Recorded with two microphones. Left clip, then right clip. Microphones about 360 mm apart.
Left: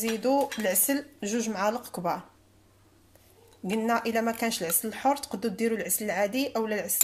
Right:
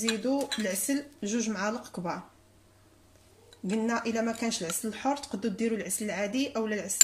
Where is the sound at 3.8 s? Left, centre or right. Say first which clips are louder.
Left 4 dB; centre.